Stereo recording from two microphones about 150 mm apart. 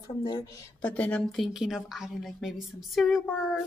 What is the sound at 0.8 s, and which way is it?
A woman's voice, 10° left (ahead or behind).